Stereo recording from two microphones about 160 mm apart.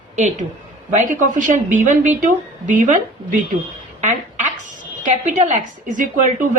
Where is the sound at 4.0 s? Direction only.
50° right (ahead or behind).